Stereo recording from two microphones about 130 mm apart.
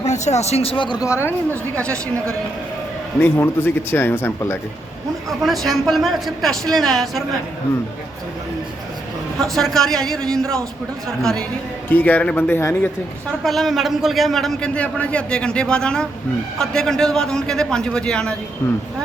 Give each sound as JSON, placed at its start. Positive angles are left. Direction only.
{"t": 0.0, "sound": "speech", "side_deg": 60}
{"t": 1.0, "sound": "a woman's voice", "side_deg": 20}
{"t": 3.2, "sound": "speech", "side_deg": 15}
{"t": 5.3, "sound": "a man's voice", "side_deg": 0}
{"t": 9.4, "sound": "a man's voice", "side_deg": 0}
{"t": 13.4, "sound": "a man's voice", "side_deg": 0}